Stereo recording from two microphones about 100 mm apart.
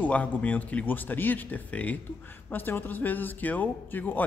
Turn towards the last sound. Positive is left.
turn(degrees=15)  # may be behind; listen again after turning